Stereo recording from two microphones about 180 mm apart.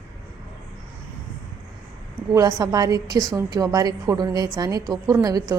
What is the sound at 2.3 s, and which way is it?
A woman's voice, 20° right (ahead or behind).